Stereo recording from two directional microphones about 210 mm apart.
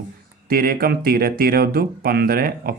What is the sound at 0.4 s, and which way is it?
Speech, 45° right (ahead or behind).